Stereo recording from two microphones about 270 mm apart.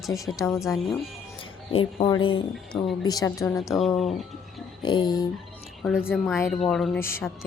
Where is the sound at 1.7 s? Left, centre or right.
Centre.